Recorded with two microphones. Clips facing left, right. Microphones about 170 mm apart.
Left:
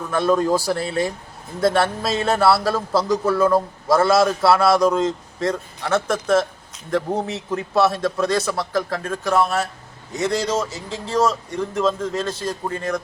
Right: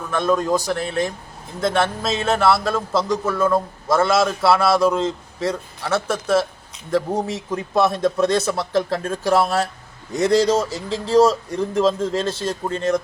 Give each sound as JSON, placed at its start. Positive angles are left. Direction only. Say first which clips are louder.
{"t": 0.1, "sound": "a man's voice", "louder": "left 1 dB", "side_deg": 5}
{"t": 7.3, "sound": "a man's voice", "louder": "left 2 dB", "side_deg": -15}